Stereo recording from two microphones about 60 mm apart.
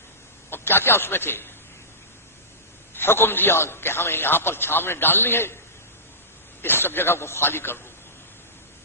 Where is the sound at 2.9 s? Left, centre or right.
Left.